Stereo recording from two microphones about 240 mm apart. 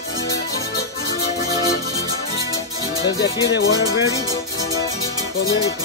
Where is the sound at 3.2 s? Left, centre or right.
Left.